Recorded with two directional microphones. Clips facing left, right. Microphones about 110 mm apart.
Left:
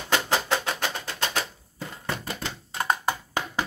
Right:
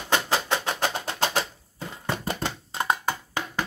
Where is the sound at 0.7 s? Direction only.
35° right (ahead or behind).